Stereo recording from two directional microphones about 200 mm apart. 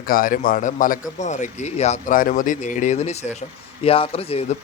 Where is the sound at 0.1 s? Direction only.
45° left (ahead or behind).